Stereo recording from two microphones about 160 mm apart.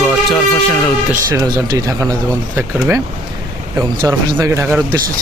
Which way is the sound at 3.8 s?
20° right (ahead or behind).